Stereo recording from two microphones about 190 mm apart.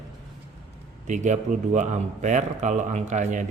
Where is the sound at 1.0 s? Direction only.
40° right (ahead or behind).